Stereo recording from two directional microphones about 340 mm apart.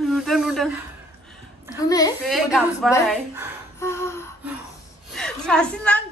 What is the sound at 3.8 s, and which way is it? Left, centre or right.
Gasp, centre.